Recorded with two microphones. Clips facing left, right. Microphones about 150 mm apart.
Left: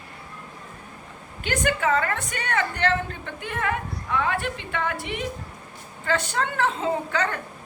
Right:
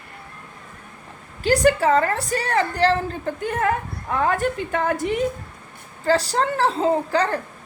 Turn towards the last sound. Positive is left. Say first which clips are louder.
# right 5 dB
turn(degrees=-35)  # may be behind; listen again after turning